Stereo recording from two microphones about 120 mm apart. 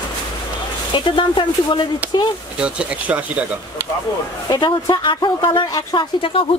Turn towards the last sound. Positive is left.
turn(degrees=45)  # may be behind; listen again after turning